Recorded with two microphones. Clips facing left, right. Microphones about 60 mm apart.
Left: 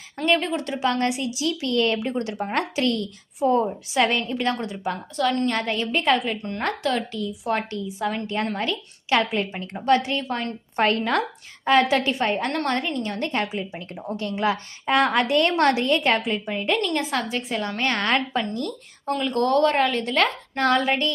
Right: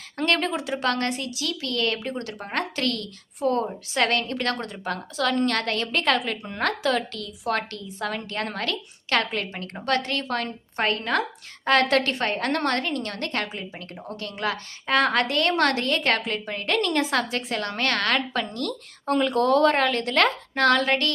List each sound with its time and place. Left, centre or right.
0.3 s a woman's voice: centre
0.9 s a woman's voice: centre
10.8 s a woman's voice: left
11.6 s a woman's voice: centre
12.9 s a woman's voice: centre
14.2 s a woman's voice: left
15.7 s a woman's voice: centre
16.9 s a woman's voice: centre
19.2 s a woman's voice: centre